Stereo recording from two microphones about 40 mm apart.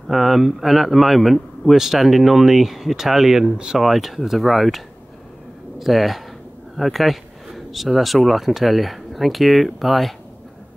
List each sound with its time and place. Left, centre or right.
0.1 s speech: centre
3.8 s speech: centre